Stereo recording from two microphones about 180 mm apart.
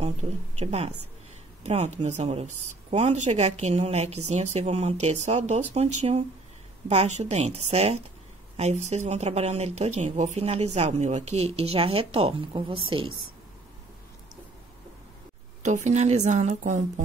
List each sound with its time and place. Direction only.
0.0 s speech: 35° right (ahead or behind)
15.6 s speech: 40° right (ahead or behind)